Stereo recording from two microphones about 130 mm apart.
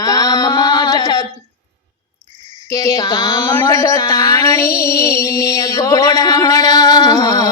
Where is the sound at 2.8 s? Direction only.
30° left (ahead or behind).